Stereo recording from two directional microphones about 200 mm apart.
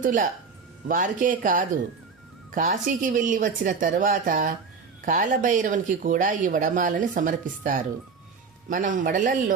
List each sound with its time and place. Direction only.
0.0 s speech: 40° right (ahead or behind)